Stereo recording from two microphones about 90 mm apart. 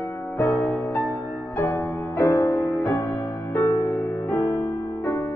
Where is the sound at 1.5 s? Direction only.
35° left (ahead or behind).